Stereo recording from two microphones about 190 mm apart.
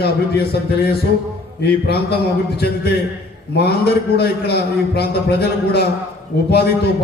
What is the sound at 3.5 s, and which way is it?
A man's voice, 60° left (ahead or behind).